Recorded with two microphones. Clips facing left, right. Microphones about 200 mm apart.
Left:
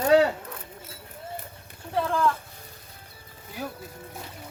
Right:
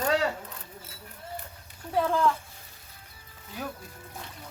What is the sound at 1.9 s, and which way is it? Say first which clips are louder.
Speech: even; 15° right (ahead or behind).